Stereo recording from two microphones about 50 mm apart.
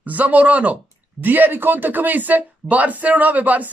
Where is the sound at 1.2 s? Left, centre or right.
Right.